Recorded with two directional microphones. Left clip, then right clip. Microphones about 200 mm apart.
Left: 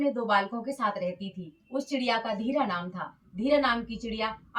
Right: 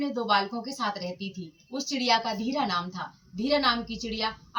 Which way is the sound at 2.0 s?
15° left (ahead or behind).